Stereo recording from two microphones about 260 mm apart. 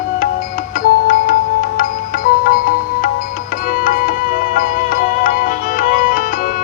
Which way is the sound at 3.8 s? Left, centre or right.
Left.